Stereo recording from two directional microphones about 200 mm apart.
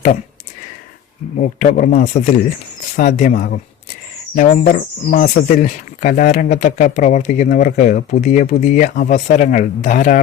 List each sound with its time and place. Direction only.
1.4 s speech: 40° left (ahead or behind)